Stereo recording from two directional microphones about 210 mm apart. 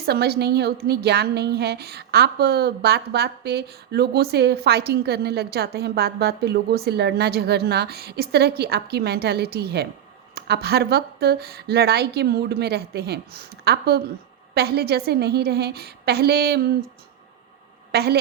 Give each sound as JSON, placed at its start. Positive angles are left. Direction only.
{"t": 0.0, "sound": "a woman's voice", "side_deg": -50}
{"t": 17.9, "sound": "a woman's voice", "side_deg": -50}